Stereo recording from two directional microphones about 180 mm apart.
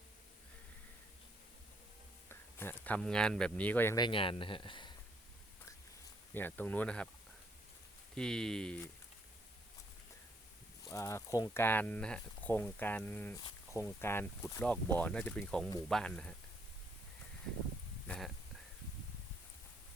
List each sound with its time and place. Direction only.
2.3 s speech: 10° left (ahead or behind)
4.0 s speech: 30° left (ahead or behind)
6.3 s speech: 10° left (ahead or behind)
8.1 s speech: 5° left (ahead or behind)
10.8 s speech: 15° left (ahead or behind)